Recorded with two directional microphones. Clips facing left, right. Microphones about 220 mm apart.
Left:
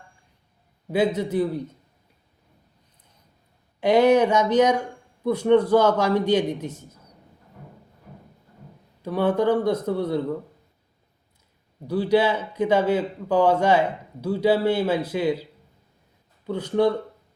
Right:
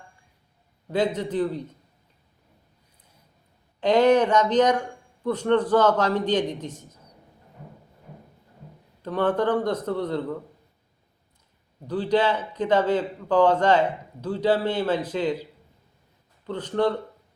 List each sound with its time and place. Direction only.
0.9 s a man's voice: 10° left (ahead or behind)
3.8 s a man's voice: 10° left (ahead or behind)
9.0 s a man's voice: 10° left (ahead or behind)
11.9 s a man's voice: 10° left (ahead or behind)
16.5 s a man's voice: 10° left (ahead or behind)